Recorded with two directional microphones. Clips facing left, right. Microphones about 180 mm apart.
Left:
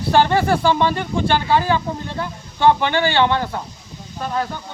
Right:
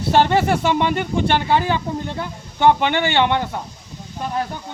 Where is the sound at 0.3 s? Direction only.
20° right (ahead or behind).